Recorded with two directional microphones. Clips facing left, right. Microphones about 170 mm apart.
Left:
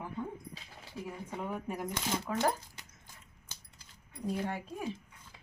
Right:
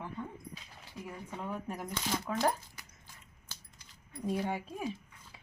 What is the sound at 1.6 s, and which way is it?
Speech, 10° left (ahead or behind).